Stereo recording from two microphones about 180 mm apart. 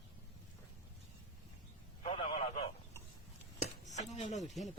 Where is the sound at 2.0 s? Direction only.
35° left (ahead or behind).